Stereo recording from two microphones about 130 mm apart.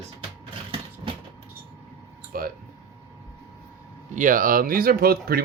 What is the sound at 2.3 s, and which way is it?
Speech, 90° right.